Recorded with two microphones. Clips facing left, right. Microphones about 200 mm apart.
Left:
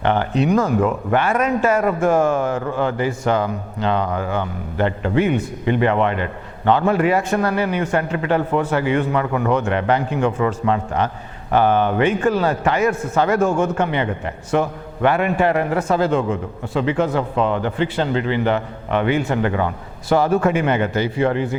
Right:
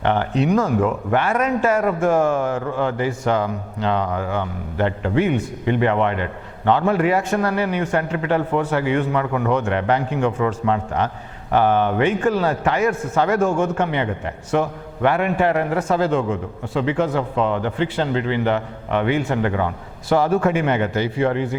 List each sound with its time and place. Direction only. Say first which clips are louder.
0.0 s a man's voice: left 1 dB; 15° left (ahead or behind)